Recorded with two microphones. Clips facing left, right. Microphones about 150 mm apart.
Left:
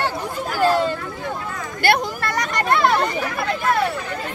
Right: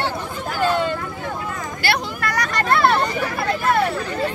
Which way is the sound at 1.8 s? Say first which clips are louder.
Left 5 dB; 50° left (ahead or behind).